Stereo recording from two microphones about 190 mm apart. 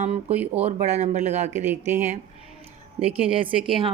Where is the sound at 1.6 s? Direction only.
10° right (ahead or behind).